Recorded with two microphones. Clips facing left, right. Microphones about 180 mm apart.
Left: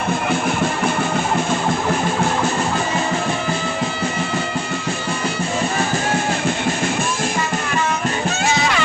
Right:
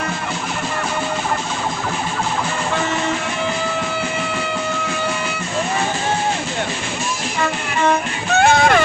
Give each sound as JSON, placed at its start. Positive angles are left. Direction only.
{"t": 8.3, "sound": "music", "side_deg": -60}